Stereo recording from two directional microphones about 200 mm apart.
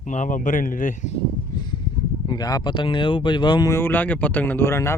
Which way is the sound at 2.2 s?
20° left (ahead or behind).